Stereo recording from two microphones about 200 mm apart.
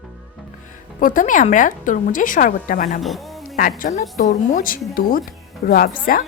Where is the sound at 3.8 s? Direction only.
40° left (ahead or behind).